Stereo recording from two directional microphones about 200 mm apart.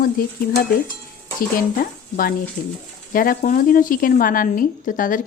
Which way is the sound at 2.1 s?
45° left (ahead or behind).